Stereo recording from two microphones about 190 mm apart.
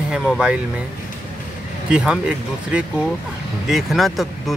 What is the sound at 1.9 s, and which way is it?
Speech, 5° right (ahead or behind).